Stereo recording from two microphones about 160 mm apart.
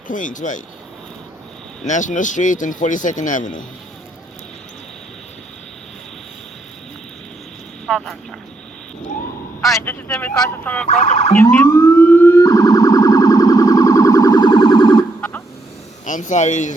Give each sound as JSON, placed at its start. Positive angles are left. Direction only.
{"t": 0.1, "sound": "speech", "side_deg": 55}
{"t": 1.8, "sound": "speech", "side_deg": 50}
{"t": 7.9, "sound": "speech", "side_deg": 0}
{"t": 9.7, "sound": "speech", "side_deg": 15}
{"t": 10.8, "sound": "speech", "side_deg": 45}
{"t": 11.3, "sound": "police car", "side_deg": 15}
{"t": 16.0, "sound": "speech", "side_deg": 50}